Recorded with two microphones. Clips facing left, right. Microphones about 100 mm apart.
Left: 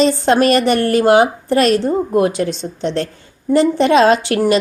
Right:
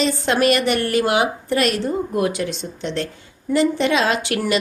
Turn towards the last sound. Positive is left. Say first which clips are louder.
# left 8 dB
turn(degrees=35)  # may be behind; listen again after turning